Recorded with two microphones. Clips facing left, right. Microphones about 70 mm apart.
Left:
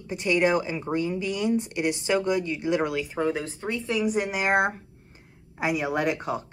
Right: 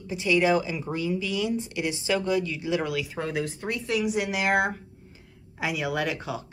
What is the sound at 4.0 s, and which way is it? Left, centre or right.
Speech, left.